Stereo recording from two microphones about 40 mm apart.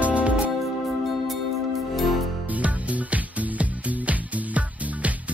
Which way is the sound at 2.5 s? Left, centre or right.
Right.